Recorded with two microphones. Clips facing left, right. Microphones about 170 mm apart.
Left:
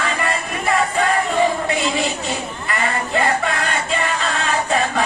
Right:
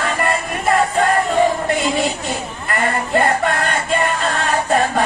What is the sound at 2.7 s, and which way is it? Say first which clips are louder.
Music: right 3 dB; 50° right (ahead or behind).